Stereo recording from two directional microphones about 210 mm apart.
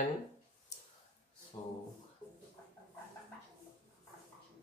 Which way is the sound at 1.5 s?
15° left (ahead or behind).